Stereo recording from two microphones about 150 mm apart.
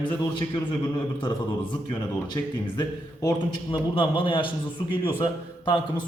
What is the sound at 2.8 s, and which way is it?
A man's voice, 25° left (ahead or behind).